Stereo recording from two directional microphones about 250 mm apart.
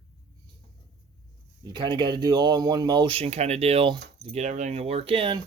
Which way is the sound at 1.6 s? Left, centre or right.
Centre.